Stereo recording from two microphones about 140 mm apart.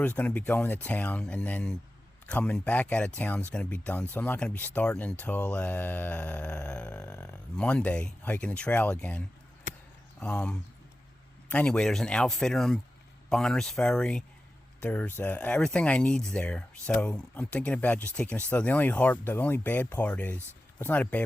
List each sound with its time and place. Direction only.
0.2 s speech: 10° left (ahead or behind)
9.7 s basketball bounce: 65° left (ahead or behind)
10.2 s a man's voice: 10° left (ahead or behind)